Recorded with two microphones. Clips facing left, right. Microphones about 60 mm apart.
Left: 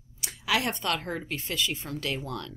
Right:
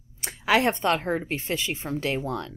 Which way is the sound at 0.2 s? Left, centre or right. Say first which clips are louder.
Right 6 dB; right.